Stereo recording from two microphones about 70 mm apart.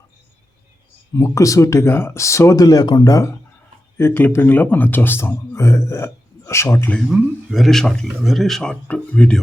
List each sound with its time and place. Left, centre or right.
1.1 s speech: left
3.9 s a man's voice: left
7.1 s speech: centre